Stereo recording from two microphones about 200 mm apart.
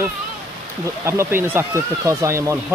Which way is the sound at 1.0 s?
10° right (ahead or behind).